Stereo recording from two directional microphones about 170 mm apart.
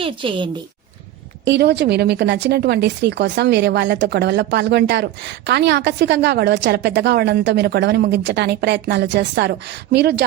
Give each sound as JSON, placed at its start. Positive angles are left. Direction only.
{"t": 0.0, "sound": "a woman's voice", "side_deg": -30}
{"t": 1.5, "sound": "a woman's voice", "side_deg": -80}